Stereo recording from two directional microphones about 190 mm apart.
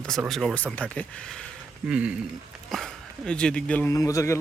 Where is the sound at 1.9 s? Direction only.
5° right (ahead or behind).